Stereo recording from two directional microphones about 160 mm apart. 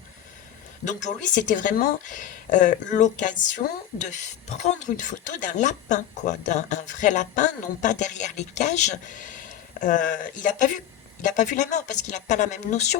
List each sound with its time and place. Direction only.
0.9 s speech: 50° left (ahead or behind)